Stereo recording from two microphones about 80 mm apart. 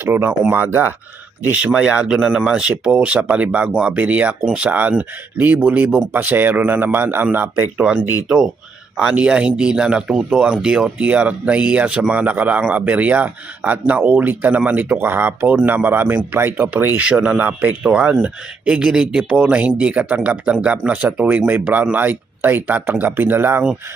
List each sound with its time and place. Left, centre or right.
0.0 s speech: right
1.6 s speech: centre
7.8 s speech: centre
17.0 s speech: centre